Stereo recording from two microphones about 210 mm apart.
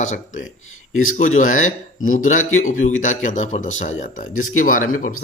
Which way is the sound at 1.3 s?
35° left (ahead or behind).